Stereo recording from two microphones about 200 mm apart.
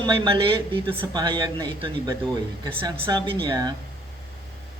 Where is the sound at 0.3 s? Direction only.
25° right (ahead or behind).